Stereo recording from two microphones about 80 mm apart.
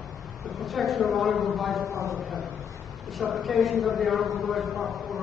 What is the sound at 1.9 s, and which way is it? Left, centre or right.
Speech, right.